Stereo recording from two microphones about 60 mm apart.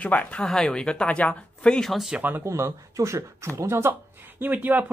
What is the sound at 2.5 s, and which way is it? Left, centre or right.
Speech, right.